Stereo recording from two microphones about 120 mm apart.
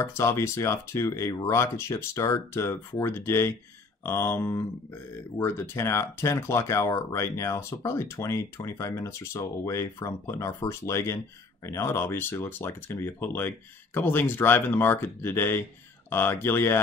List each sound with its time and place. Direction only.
0.0 s speech: 25° left (ahead or behind)